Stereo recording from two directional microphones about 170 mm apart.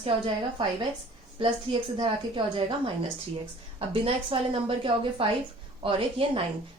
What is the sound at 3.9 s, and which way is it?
A woman's voice, 30° right (ahead or behind).